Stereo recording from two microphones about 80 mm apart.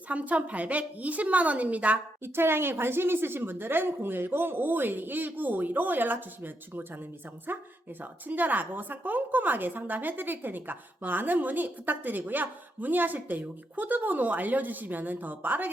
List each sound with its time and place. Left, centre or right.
0.1 s a woman's voice: centre
2.2 s a woman's voice: right